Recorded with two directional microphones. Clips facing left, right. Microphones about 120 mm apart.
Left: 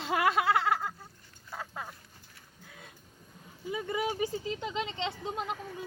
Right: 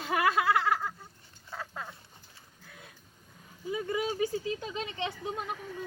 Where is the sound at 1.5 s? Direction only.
15° left (ahead or behind).